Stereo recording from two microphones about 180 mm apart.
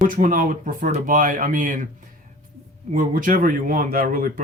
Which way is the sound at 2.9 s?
50° right (ahead or behind).